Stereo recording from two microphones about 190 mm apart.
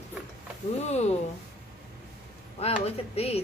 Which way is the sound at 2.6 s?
35° left (ahead or behind).